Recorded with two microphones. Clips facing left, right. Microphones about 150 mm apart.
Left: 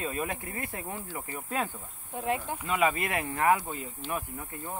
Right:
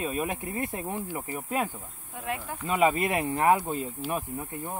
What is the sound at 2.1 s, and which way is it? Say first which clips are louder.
Speech: left 4 dB; 25° left (ahead or behind).